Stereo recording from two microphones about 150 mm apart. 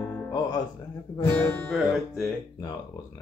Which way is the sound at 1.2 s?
10° left (ahead or behind).